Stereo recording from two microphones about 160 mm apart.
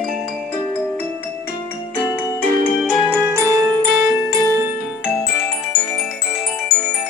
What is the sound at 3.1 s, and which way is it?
Music, 15° right (ahead or behind).